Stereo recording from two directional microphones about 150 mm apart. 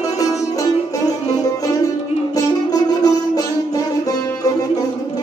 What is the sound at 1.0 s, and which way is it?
Music, 25° left (ahead or behind).